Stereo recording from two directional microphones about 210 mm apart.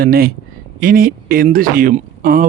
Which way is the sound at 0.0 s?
45° right (ahead or behind).